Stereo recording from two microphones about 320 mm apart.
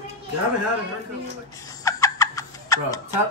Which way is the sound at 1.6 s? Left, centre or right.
Centre.